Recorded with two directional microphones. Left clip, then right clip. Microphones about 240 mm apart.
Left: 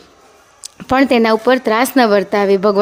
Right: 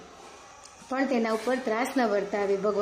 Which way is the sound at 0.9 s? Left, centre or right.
Left.